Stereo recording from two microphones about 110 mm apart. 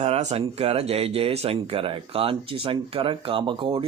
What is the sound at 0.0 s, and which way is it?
Speech, 80° right.